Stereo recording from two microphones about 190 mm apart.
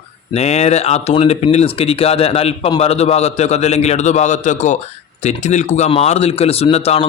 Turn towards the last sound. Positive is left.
turn(degrees=35)  # may be behind; listen again after turning